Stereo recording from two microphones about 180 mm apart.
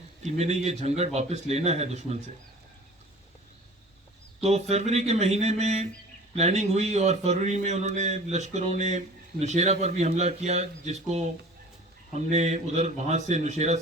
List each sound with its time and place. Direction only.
0.2 s a man's voice: 40° right (ahead or behind)
4.4 s a man's voice: 40° right (ahead or behind)